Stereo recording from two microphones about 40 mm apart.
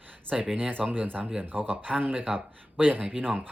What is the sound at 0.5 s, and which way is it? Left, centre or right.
Speech, right.